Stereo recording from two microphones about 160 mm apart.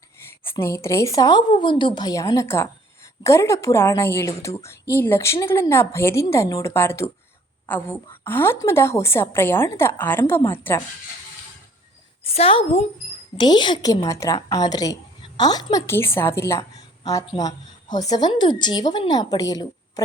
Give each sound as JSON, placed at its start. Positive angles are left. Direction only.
{"t": 0.5, "sound": "a woman's voice", "side_deg": 20}
{"t": 12.2, "sound": "a woman's voice", "side_deg": 35}